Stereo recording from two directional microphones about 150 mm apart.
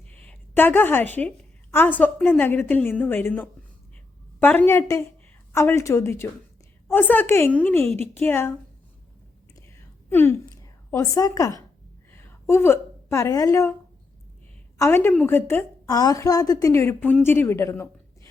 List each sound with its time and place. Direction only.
0.1 s a sound: 10° left (ahead or behind)
1.7 s a woman's voice: 10° left (ahead or behind)
9.6 s whispering: 15° left (ahead or behind)
10.9 s a woman's voice: 20° left (ahead or behind)
14.8 s a woman's voice: 15° left (ahead or behind)